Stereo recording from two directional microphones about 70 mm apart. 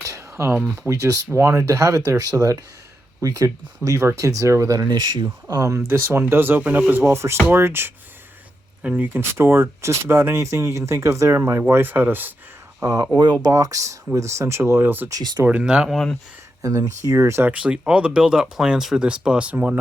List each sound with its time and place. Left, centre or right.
0.1 s a sound: right
0.9 s speech: right
7.0 s speech: right
8.8 s speech: right
9.3 s speech: right
11.7 s speech: right
12.8 s speech: right
15.1 s speech: right
15.4 s speech: centre
15.9 s speech: centre
16.6 s speech: right
17.4 s speech: centre